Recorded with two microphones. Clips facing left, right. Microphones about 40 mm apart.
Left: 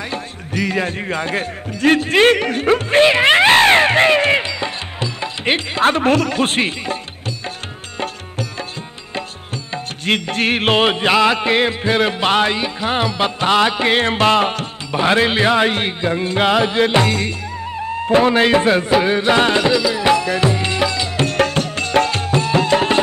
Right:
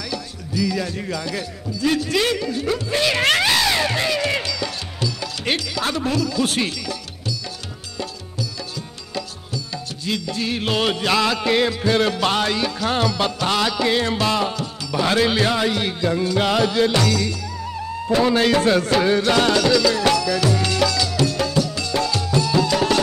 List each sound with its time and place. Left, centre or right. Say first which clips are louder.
0.0 s music: left 3 dB; left
3.2 s cat: left 6 dB; left
3.4 s music: left 8 dB; left
9.7 s music: left 8 dB; left; by 20.2 s centre
20.2 s music: left 2 dB; left
21.3 s music: left 4 dB; left